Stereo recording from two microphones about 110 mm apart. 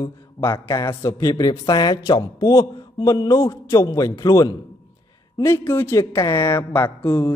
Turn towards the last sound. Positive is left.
turn(degrees=20)  # may be behind; listen again after turning